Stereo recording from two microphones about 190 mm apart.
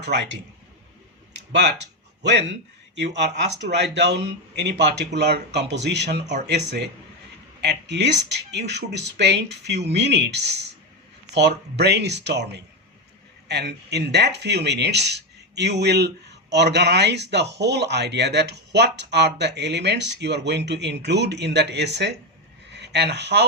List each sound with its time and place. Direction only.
0.0 s speech: 65° right (ahead or behind)
2.2 s speech: 65° right (ahead or behind)
7.6 s speech: 60° right (ahead or behind)